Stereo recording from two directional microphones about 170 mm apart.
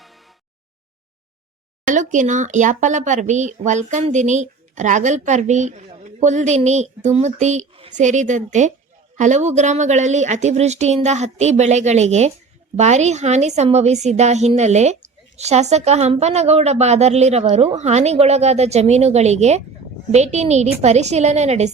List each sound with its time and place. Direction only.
1.9 s a woman's voice: 45° right (ahead or behind)